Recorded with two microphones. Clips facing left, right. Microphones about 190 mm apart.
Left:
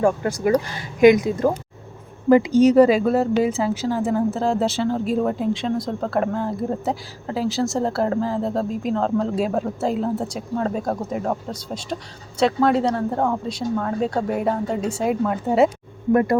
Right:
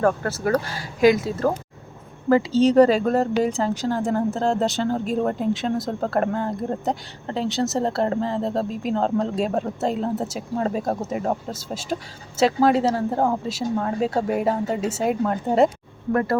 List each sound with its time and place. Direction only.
0.0 s speech: 15° left (ahead or behind)
16.1 s speech: 15° left (ahead or behind)